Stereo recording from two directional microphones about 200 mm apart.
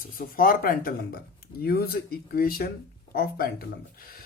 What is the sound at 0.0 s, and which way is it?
Speech, 45° left (ahead or behind).